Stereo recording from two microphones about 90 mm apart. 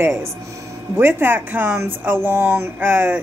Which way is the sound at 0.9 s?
25° right (ahead or behind).